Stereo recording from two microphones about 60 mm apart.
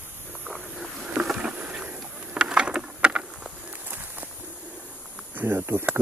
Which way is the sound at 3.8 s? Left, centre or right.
Right.